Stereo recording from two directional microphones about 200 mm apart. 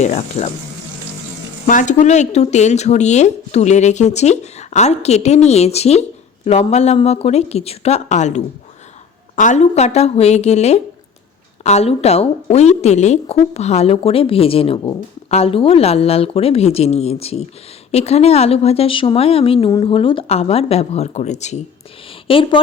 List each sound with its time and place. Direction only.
0.0 s speech: 35° left (ahead or behind)
1.6 s a woman's voice: 40° left (ahead or behind)